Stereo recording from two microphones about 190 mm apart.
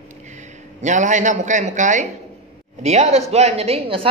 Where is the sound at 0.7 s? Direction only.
40° right (ahead or behind).